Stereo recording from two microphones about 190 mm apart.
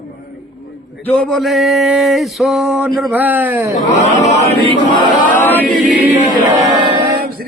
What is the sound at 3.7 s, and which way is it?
Speech, 40° left (ahead or behind).